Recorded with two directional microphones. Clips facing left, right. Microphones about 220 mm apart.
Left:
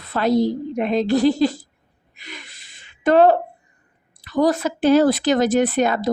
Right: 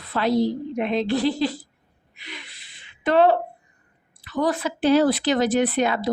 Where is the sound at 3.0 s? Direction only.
45° left (ahead or behind).